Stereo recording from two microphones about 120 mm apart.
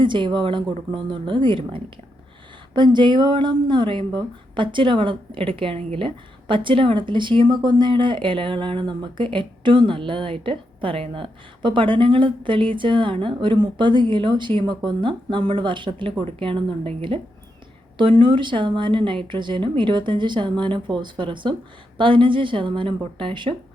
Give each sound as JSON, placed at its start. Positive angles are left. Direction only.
{"t": 0.0, "sound": "speech", "side_deg": -40}
{"t": 18.2, "sound": "speech", "side_deg": -40}